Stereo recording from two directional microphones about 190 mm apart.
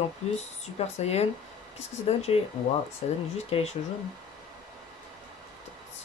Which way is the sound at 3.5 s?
35° left (ahead or behind).